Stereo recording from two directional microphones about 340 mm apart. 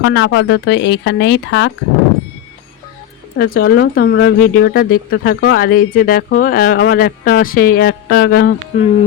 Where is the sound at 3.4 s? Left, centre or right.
Left.